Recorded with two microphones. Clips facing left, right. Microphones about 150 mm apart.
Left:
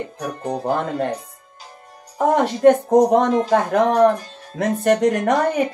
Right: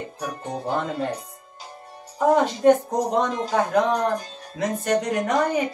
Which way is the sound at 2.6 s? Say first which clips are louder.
Left 5 dB; 55° left (ahead or behind).